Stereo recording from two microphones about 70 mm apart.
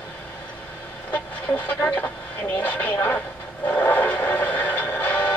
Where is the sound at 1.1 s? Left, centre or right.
Left.